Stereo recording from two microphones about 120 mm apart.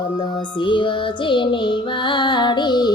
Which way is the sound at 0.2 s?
40° left (ahead or behind).